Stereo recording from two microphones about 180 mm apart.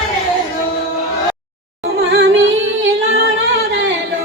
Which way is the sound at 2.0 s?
70° right (ahead or behind).